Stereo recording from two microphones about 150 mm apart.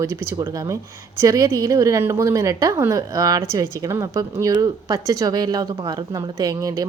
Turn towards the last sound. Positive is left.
turn(degrees=-25)  # may be behind; listen again after turning